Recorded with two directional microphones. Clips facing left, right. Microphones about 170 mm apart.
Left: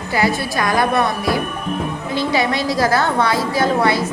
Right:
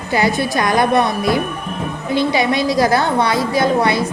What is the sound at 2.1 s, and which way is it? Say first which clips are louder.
A woman's voice: right 3 dB; 15° right (ahead or behind).